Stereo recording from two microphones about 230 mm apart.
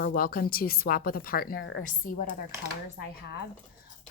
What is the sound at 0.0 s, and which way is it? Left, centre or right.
A woman's voice, left.